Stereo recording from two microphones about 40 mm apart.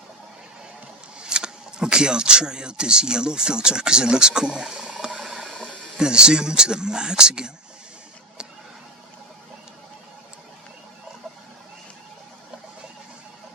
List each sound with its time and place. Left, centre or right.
1.2 s speech: right
5.2 s water: centre
6.0 s speech: right